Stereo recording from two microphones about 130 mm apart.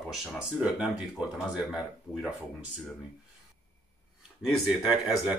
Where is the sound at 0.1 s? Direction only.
5° right (ahead or behind).